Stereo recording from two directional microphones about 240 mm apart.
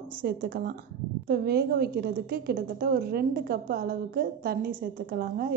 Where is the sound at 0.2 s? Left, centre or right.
Right.